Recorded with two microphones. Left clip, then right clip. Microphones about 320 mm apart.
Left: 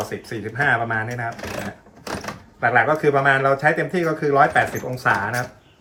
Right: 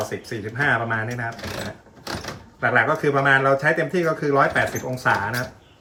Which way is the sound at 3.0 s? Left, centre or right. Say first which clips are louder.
Left 1 dB; centre.